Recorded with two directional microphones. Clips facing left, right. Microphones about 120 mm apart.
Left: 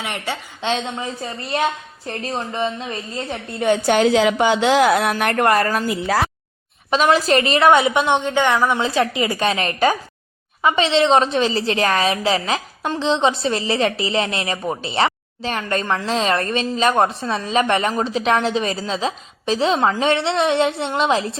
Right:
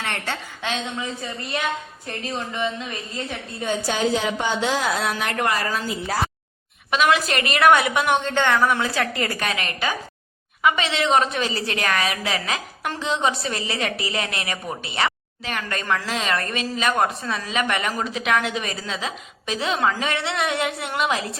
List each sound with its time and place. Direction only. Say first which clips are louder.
0.0 s a woman's voice: left 2 dB; 15° left (ahead or behind)
0.6 s a woman's voice: left 6 dB; 30° left (ahead or behind)
3.6 s speech: left 7 dB; 70° left (ahead or behind); by 6.0 s 55° left (ahead or behind)
6.9 s a woman's voice: left 4 dB; 35° left (ahead or behind)